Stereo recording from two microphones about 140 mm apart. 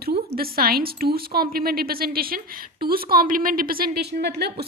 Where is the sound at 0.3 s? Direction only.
90° right.